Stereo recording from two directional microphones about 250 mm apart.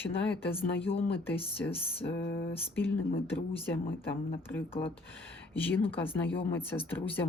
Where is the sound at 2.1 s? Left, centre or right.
Left.